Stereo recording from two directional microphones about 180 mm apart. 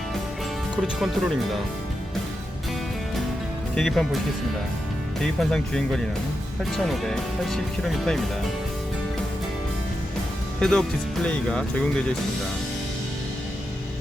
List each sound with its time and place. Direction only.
0.8 s speech: centre (ahead or behind)
3.8 s speech: centre (ahead or behind)
5.2 s speech: 5° left (ahead or behind)
10.6 s speech: centre (ahead or behind)